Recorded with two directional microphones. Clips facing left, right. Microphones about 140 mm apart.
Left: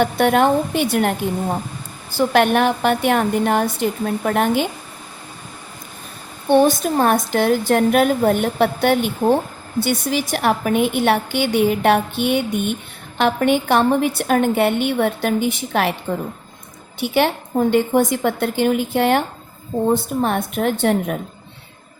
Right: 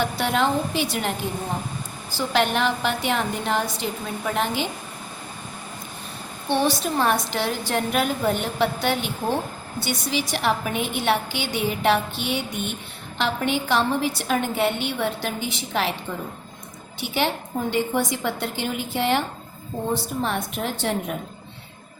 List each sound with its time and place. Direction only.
0.0 s a woman's voice: 55° left (ahead or behind)
2.1 s a woman's voice: 55° left (ahead or behind)
6.5 s a woman's voice: 50° left (ahead or behind)
17.0 s a woman's voice: 55° left (ahead or behind)